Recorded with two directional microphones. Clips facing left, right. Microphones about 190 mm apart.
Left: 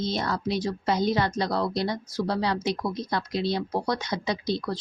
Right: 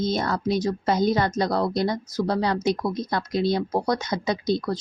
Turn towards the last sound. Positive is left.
turn(degrees=-45)  # may be behind; listen again after turning